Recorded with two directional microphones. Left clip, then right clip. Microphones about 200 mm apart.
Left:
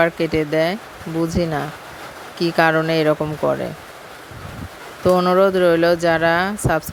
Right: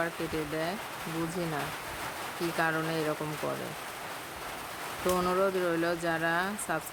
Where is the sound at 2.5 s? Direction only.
40° left (ahead or behind).